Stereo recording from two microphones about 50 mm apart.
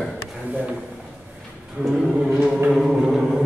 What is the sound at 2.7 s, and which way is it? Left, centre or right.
Speech, centre.